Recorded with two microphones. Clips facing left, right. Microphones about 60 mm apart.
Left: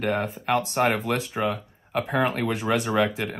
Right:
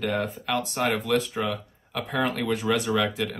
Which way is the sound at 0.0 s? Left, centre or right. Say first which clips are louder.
Left 2 dB; left.